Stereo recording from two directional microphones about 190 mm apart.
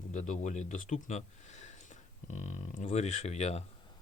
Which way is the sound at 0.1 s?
40° left (ahead or behind).